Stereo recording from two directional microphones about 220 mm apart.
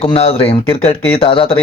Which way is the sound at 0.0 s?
25° left (ahead or behind).